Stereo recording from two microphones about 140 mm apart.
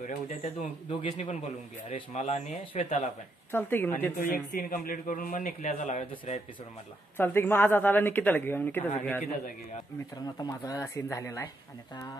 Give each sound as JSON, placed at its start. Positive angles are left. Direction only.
{"t": 0.0, "sound": "speech", "side_deg": 55}
{"t": 3.5, "sound": "speech", "side_deg": 15}
{"t": 3.9, "sound": "a man's voice", "side_deg": 75}
{"t": 7.2, "sound": "speech", "side_deg": 15}
{"t": 10.1, "sound": "speech", "side_deg": 30}